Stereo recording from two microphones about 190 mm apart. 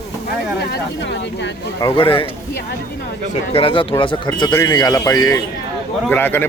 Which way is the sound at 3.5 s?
25° left (ahead or behind).